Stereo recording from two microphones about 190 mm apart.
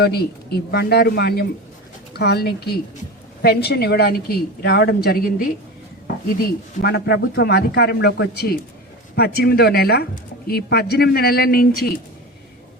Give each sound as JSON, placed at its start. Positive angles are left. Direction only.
{"t": 0.0, "sound": "speech", "side_deg": 60}
{"t": 6.8, "sound": "speech", "side_deg": 60}